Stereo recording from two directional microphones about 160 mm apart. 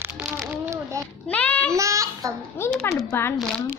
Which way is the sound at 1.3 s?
10° left (ahead or behind).